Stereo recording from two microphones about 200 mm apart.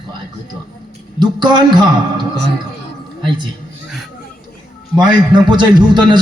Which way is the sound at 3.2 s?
25° right (ahead or behind).